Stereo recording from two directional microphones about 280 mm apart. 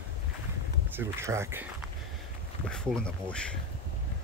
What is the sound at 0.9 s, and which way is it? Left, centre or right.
Speech, centre.